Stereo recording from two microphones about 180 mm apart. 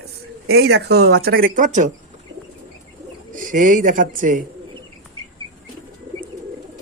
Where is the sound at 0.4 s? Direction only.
65° right (ahead or behind); by 1.9 s 45° right (ahead or behind).